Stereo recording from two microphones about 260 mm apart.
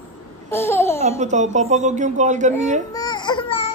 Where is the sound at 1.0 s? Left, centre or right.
Right.